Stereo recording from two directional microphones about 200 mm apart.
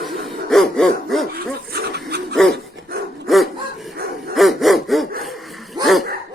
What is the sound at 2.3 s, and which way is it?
Dog, centre (ahead or behind).